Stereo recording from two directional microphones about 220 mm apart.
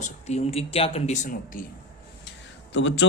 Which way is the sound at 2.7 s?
55° left (ahead or behind).